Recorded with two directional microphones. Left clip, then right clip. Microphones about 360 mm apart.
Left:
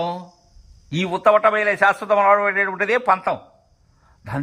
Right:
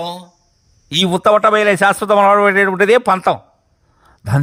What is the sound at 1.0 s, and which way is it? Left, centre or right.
Speech, right.